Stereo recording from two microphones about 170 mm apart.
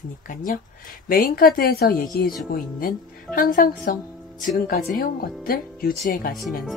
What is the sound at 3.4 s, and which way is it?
Speech, 55° left (ahead or behind).